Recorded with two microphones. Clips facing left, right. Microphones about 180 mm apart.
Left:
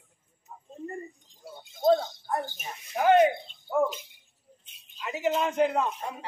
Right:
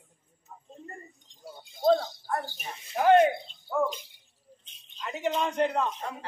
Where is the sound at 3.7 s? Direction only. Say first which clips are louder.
Left 2 dB; 15° left (ahead or behind).